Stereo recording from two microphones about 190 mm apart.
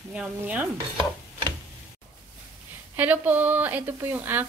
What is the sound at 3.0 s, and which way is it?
A woman's voice, 10° right (ahead or behind).